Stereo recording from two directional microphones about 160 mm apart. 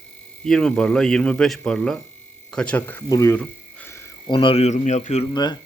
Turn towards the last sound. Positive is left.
turn(degrees=25)  # may be behind; listen again after turning